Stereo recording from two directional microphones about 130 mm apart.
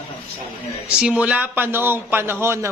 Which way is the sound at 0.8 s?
10° right (ahead or behind).